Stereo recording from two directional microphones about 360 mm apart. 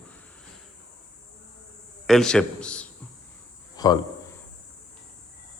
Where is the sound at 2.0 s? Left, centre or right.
Centre.